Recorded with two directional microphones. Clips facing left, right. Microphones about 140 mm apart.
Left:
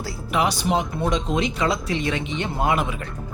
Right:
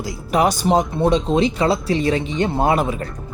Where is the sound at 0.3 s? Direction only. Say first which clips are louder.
Right 5 dB; 45° right (ahead or behind).